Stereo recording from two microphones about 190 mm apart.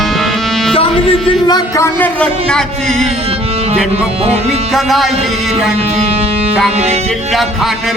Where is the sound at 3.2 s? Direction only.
30° right (ahead or behind).